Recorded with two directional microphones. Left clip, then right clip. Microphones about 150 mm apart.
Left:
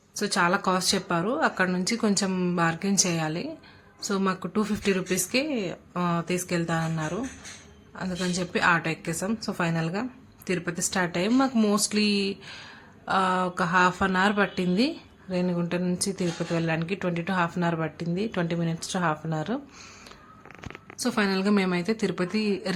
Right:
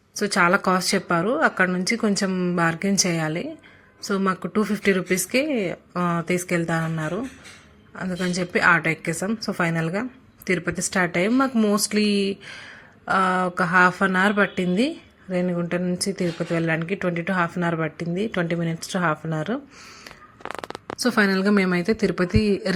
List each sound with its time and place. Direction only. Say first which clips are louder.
0.2 s a woman's voice: right 5 dB; 20° right (ahead or behind)
20.5 s speech: right 11 dB; 30° right (ahead or behind)